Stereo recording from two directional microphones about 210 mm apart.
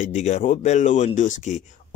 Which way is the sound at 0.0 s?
35° left (ahead or behind).